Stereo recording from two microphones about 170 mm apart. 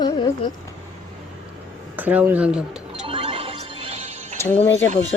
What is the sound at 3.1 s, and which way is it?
Music, 30° right (ahead or behind).